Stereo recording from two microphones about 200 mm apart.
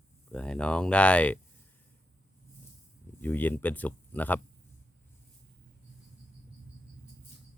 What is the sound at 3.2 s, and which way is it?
Speech, 10° left (ahead or behind).